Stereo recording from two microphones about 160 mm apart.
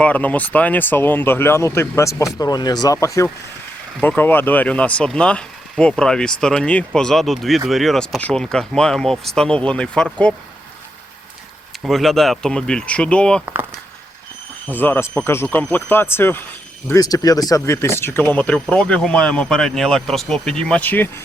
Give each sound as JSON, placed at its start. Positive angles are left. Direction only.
{"t": 0.0, "sound": "speech", "side_deg": 10}
{"t": 11.8, "sound": "speech", "side_deg": 0}
{"t": 13.4, "sound": "speech", "side_deg": -10}
{"t": 14.7, "sound": "speech", "side_deg": 10}